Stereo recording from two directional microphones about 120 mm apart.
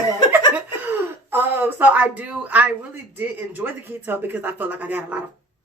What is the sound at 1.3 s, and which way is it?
Speech, 20° right (ahead or behind).